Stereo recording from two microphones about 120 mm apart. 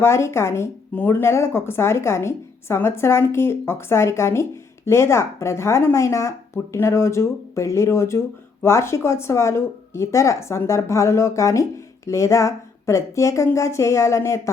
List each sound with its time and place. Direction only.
0.0 s speech: 20° left (ahead or behind)